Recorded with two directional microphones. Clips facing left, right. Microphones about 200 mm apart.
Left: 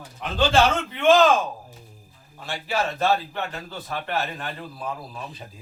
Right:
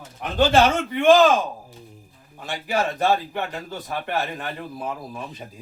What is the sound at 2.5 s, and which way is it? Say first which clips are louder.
A man's voice: right 2 dB; 15° right (ahead or behind).